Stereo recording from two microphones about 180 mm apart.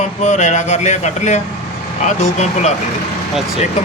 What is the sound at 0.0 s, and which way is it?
Speech, 40° left (ahead or behind).